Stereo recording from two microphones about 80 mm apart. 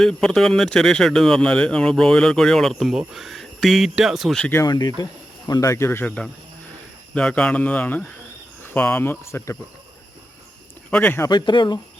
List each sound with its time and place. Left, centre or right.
0.0 s speech: centre
4.6 s speech: left
5.5 s speech: left
6.1 s speech: centre; by 9.5 s left
11.3 s speech: left